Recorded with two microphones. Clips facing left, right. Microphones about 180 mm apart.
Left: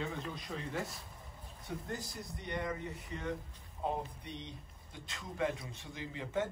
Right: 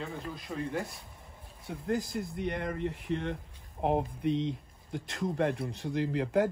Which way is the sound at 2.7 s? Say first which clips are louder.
Right 9 dB; 75° right (ahead or behind).